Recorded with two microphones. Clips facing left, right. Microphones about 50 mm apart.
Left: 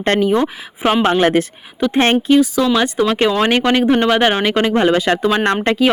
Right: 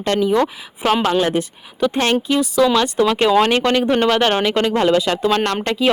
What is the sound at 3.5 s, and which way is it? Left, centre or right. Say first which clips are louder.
Speech: left 2 dB; left.